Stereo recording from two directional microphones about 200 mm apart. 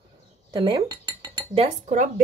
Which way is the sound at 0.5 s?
25° right (ahead or behind).